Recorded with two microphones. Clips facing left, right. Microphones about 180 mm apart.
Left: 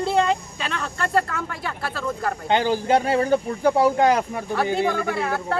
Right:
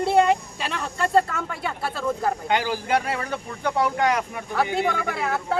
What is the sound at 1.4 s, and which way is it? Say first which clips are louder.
Speech: right 1 dB; centre (ahead or behind).